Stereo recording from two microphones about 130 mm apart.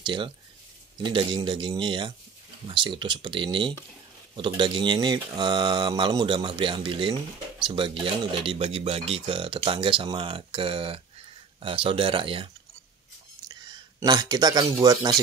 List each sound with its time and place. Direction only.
0.0 s speech: 40° right (ahead or behind)
13.5 s speech: 30° right (ahead or behind)